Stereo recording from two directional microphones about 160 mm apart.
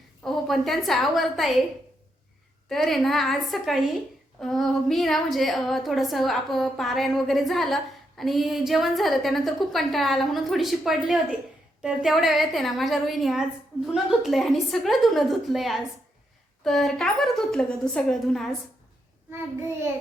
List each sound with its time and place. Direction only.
0.2 s a woman's voice: centre (ahead or behind)
2.6 s a woman's voice: centre (ahead or behind)